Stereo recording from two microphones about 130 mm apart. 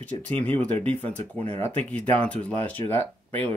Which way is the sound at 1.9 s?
10° left (ahead or behind).